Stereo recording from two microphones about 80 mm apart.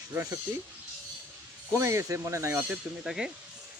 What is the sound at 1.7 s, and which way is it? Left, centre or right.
Speech, right.